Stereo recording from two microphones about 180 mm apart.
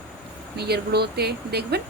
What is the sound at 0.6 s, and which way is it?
A woman's voice, 65° right (ahead or behind).